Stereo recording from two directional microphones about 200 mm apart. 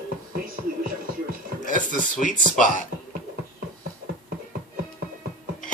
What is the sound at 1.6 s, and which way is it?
Speech, 40° left (ahead or behind).